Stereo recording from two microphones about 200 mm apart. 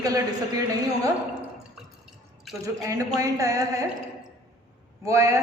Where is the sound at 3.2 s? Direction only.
15° right (ahead or behind).